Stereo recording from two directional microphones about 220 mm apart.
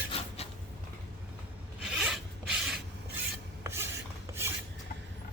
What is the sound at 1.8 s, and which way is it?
Filing, 5° right (ahead or behind).